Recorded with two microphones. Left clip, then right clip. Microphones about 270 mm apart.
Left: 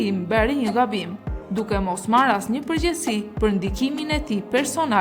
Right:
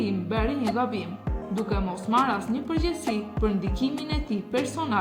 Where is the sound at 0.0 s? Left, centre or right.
Left.